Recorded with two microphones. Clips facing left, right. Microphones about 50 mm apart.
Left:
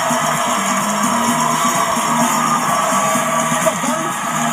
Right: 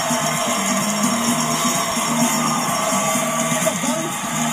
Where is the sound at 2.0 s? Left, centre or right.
Left.